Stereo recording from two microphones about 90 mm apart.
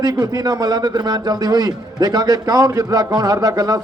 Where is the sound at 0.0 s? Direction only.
45° right (ahead or behind).